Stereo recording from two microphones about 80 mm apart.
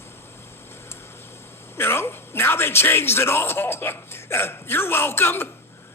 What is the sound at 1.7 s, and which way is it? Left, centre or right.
Speech, left.